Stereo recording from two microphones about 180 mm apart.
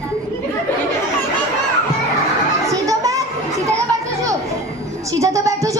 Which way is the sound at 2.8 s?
20° right (ahead or behind).